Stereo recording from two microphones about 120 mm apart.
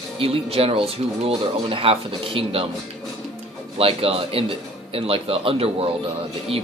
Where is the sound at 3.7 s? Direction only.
55° right (ahead or behind).